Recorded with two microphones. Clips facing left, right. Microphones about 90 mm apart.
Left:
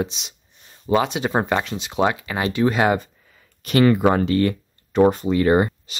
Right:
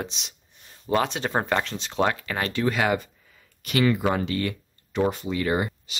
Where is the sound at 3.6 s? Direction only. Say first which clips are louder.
Left 6 dB; 40° left (ahead or behind).